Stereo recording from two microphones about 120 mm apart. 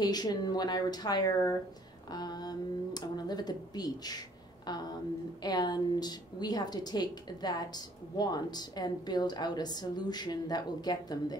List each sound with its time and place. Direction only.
0.0 s a woman's voice: 35° left (ahead or behind)